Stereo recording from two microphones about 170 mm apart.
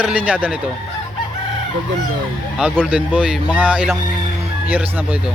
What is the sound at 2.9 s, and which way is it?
Speech, 5° right (ahead or behind).